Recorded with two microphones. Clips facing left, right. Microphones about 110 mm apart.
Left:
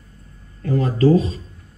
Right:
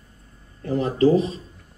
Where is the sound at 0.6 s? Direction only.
25° right (ahead or behind).